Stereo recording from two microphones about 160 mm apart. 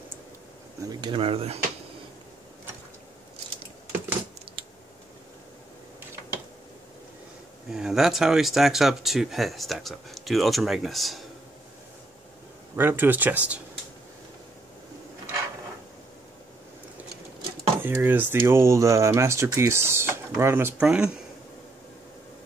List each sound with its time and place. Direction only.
0.8 s speech: 30° right (ahead or behind)
4.6 s a sound: 35° right (ahead or behind)
7.7 s speech: 5° right (ahead or behind)
12.7 s speech: 15° right (ahead or behind)
17.8 s speech: 10° right (ahead or behind)
20.8 s speech: 5° right (ahead or behind)